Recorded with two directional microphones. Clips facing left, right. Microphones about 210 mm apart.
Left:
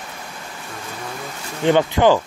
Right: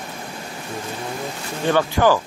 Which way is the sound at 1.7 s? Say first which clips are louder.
Left 3 dB; 20° left (ahead or behind).